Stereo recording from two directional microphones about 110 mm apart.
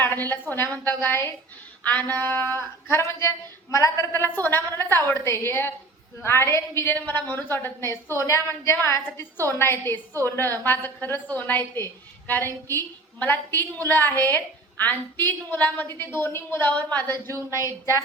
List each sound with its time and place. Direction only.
0.0 s a woman's voice: 20° left (ahead or behind)
6.9 s a woman's voice: 15° left (ahead or behind)
17.5 s a woman's voice: 30° left (ahead or behind)